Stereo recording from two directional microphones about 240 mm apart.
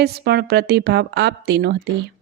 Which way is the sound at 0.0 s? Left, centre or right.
Right.